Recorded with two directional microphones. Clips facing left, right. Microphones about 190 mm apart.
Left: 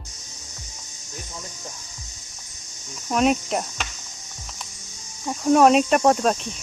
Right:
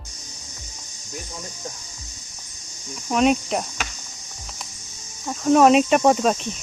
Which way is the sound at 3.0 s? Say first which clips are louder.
Right 1 dB; centre (ahead or behind).